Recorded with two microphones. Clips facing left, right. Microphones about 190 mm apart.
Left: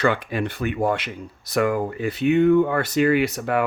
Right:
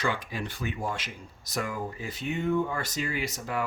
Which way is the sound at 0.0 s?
65° left (ahead or behind).